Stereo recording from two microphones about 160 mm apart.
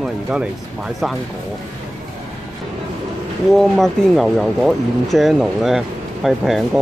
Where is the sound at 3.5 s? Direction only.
Centre (ahead or behind).